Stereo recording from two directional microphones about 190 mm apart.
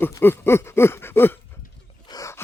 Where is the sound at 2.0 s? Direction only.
15° left (ahead or behind).